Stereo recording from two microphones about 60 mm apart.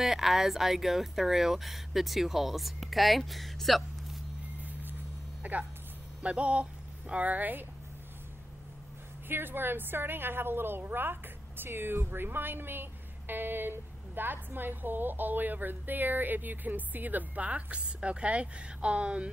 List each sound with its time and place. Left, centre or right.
0.0 s speech: centre
5.4 s speech: right
9.3 s a woman's voice: right; by 19.3 s centre